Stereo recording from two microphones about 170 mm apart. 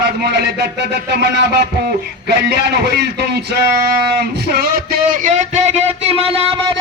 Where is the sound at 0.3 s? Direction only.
80° right.